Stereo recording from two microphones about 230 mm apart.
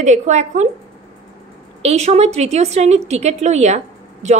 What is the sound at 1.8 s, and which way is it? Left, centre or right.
A woman's voice, right.